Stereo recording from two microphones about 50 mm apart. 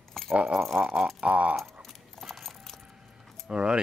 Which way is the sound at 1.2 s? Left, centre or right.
Right.